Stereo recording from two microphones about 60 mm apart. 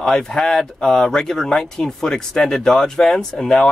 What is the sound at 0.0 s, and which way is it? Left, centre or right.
Speech, centre.